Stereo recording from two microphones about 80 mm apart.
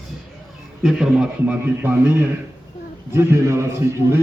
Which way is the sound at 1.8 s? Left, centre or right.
Right.